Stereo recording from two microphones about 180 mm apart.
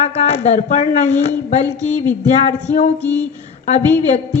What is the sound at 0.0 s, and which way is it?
Speech, 40° left (ahead or behind).